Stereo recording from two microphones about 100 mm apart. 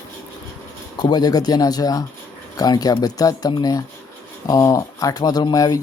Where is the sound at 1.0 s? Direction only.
45° left (ahead or behind).